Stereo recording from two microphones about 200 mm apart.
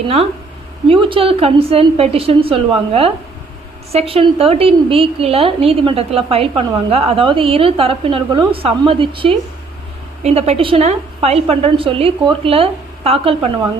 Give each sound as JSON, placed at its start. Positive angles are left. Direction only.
{"t": 0.9, "sound": "a woman's voice", "side_deg": -25}